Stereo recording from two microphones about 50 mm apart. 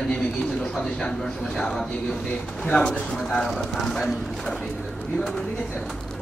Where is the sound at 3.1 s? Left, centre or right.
Centre.